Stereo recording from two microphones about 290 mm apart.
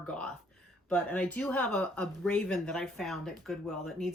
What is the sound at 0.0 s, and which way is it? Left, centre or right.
Speech, centre.